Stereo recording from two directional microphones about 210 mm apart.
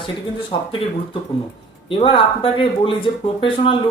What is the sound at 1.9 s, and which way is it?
Speech, 25° left (ahead or behind).